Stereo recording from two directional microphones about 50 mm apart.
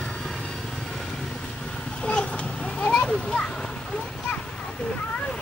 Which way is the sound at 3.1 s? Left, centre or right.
Centre.